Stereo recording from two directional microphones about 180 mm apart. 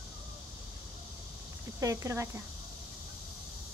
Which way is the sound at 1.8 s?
15° right (ahead or behind).